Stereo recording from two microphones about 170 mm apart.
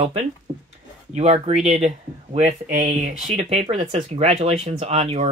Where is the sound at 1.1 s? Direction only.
40° right (ahead or behind).